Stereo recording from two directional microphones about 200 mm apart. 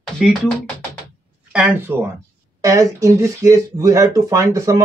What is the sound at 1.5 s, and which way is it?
Speech, 10° right (ahead or behind).